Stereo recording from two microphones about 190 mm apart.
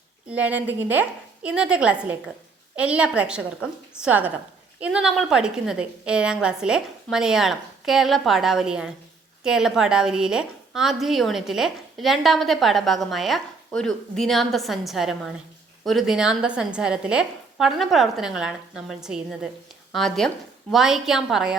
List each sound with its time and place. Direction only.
0.3 s a woman's voice: 5° right (ahead or behind)